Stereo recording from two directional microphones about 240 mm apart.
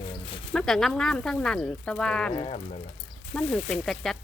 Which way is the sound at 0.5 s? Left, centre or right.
Centre.